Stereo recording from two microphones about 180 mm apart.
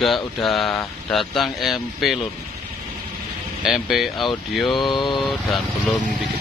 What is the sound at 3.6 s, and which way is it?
Speech, centre (ahead or behind).